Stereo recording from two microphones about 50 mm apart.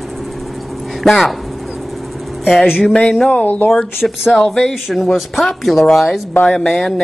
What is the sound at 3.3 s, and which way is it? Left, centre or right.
Speech, left.